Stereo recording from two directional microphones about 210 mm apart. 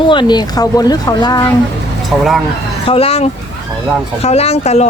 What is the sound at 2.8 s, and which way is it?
Speech, 30° left (ahead or behind).